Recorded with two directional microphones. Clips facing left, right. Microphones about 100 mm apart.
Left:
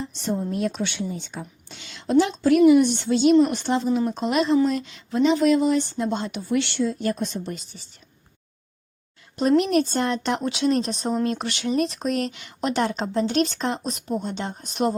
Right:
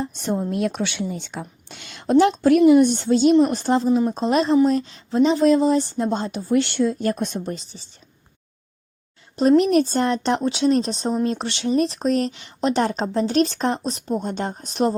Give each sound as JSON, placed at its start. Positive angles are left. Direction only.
{"t": 0.0, "sound": "speech", "side_deg": -55}
{"t": 9.9, "sound": "speech", "side_deg": -35}
{"t": 14.1, "sound": "speech", "side_deg": -45}